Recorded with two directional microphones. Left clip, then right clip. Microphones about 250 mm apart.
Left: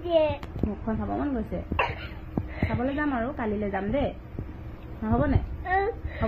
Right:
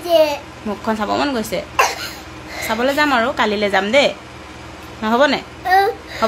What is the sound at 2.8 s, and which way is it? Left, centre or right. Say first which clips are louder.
A woman's voice: right 14 dB; right.